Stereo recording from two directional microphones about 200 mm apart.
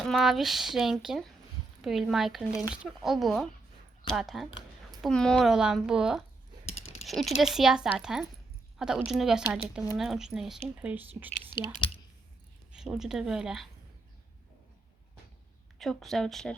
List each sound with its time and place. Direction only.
0.0 s a woman's voice: centre (ahead or behind)
11.8 s clicking: 25° left (ahead or behind)
12.7 s a woman's voice: 5° right (ahead or behind)
15.8 s a woman's voice: centre (ahead or behind)